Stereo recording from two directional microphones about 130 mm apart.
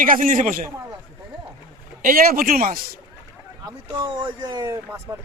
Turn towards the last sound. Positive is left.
turn(degrees=-25)  # may be behind; listen again after turning